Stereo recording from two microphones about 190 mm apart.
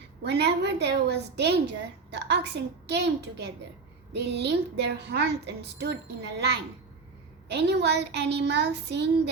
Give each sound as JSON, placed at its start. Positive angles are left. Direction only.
{"t": 0.2, "sound": "a woman's voice", "side_deg": -60}